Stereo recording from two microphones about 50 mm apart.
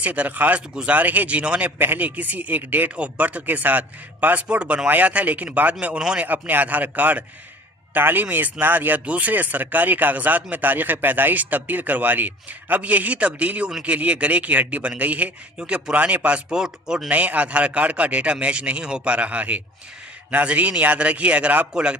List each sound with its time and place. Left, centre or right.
0.0 s speech: right
1.8 s speech: right
2.9 s speech: right
4.4 s a man's voice: right
6.0 s speech: centre
6.2 s speech: right
9.0 s a man's voice: right
16.5 s speech: centre
17.1 s a man's voice: right
21.7 s a man's voice: centre